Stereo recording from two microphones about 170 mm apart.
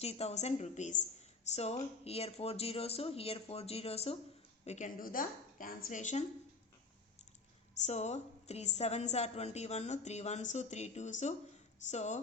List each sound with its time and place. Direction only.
0.0 s a woman's voice: 35° left (ahead or behind)
7.9 s a woman's voice: 40° left (ahead or behind)